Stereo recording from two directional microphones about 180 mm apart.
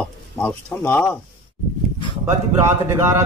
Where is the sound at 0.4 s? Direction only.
10° left (ahead or behind).